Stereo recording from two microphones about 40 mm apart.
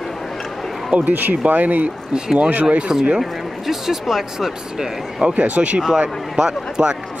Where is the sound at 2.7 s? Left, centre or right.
Right.